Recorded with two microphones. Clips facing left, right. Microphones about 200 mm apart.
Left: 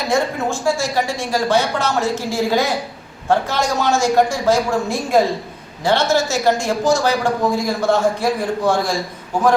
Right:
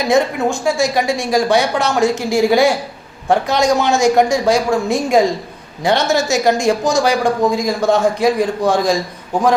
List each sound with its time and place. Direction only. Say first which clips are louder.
0.1 s a man's voice: right 4 dB; 15° right (ahead or behind)